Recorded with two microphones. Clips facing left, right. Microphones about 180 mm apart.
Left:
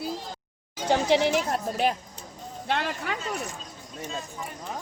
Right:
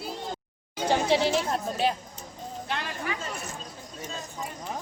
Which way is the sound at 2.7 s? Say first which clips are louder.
Left 5 dB; 60° left (ahead or behind).